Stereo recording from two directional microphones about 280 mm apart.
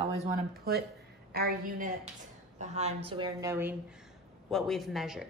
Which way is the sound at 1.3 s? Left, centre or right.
Right.